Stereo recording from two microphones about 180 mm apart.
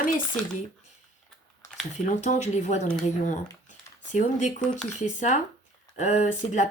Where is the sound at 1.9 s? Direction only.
40° left (ahead or behind).